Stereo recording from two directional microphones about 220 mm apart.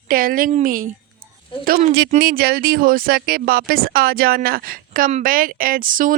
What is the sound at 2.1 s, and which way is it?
A woman's voice, 40° right (ahead or behind).